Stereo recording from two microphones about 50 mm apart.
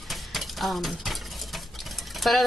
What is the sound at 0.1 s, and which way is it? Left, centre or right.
Stir, centre.